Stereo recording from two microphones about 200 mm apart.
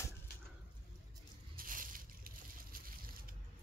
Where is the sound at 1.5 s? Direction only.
45° right (ahead or behind).